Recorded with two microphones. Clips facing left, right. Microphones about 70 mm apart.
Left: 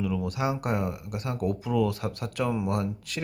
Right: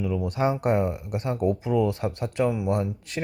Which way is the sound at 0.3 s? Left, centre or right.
Right.